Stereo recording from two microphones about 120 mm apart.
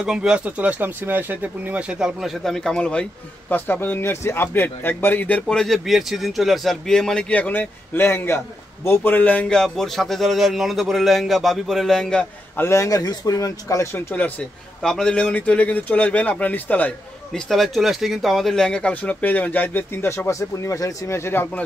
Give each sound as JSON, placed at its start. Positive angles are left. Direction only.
{"t": 0.0, "sound": "speech", "side_deg": -5}
{"t": 12.5, "sound": "speech", "side_deg": 25}
{"t": 14.8, "sound": "speech", "side_deg": 5}
{"t": 17.5, "sound": "speech", "side_deg": 0}